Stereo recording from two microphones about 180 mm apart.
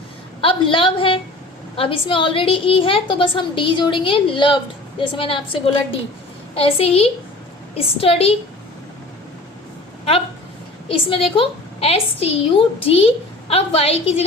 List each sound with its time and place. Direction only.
0.4 s a woman's voice: 30° left (ahead or behind)
10.8 s a woman's voice: 30° left (ahead or behind)